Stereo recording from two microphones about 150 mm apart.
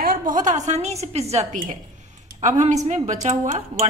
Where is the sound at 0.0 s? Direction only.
70° right (ahead or behind); by 1.4 s 45° right (ahead or behind).